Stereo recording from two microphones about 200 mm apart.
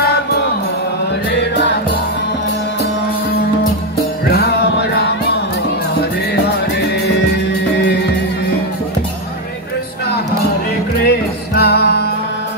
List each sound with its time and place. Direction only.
4.3 s music: 50° left (ahead or behind)
11.1 s music: 50° left (ahead or behind)